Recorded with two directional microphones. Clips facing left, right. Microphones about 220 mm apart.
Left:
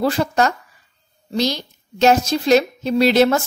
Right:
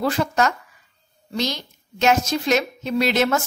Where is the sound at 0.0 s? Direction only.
35° left (ahead or behind).